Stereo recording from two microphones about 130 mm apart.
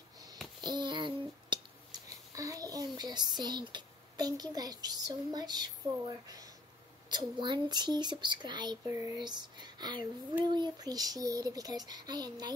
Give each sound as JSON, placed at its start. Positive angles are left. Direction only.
{"t": 0.6, "sound": "a sound", "side_deg": -35}
{"t": 7.1, "sound": "speech", "side_deg": -35}
{"t": 8.8, "sound": "speech", "side_deg": -20}
{"t": 9.1, "sound": "speech", "side_deg": -35}